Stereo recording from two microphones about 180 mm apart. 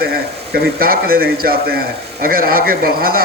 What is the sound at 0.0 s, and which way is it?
Speech, 60° right (ahead or behind).